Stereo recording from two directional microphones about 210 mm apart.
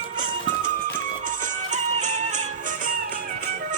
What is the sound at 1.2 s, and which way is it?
Music, 35° right (ahead or behind).